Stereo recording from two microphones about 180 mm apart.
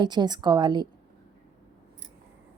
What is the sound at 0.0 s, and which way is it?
Speech, 25° right (ahead or behind).